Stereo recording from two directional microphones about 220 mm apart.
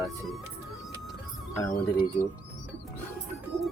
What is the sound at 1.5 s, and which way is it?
Speech, 10° left (ahead or behind).